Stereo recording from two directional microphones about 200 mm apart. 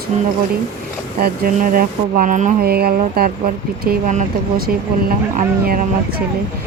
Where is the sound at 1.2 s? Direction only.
45° right (ahead or behind).